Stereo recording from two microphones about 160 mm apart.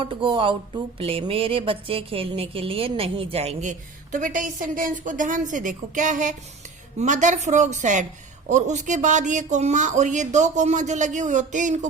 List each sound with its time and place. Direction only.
0.0 s speech: 35° right (ahead or behind); by 11.9 s 50° right (ahead or behind)